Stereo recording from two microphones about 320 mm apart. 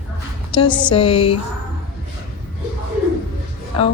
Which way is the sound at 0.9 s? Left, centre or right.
Centre.